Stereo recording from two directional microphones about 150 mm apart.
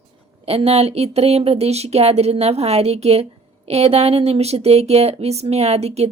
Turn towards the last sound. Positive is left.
turn(degrees=-45)  # may be behind; listen again after turning